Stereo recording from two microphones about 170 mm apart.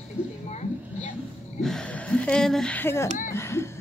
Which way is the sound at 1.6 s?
5° left (ahead or behind).